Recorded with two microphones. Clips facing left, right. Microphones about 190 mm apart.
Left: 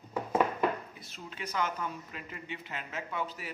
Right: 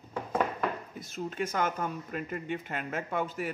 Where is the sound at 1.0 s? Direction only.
45° right (ahead or behind).